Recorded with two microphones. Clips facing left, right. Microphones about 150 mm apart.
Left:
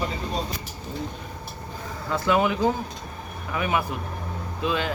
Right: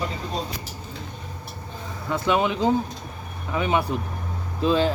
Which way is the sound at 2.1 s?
20° right (ahead or behind).